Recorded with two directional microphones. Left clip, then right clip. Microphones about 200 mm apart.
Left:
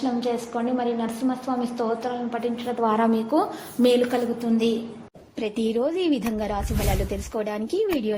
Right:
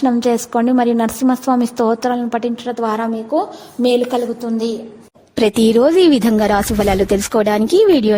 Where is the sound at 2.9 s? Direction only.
10° right (ahead or behind).